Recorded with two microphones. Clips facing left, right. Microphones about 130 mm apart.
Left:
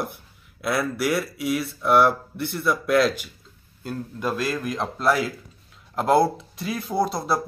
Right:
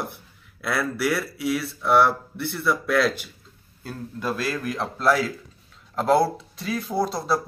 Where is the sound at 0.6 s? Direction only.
15° left (ahead or behind).